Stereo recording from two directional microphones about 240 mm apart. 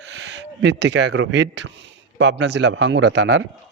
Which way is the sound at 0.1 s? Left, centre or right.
Right.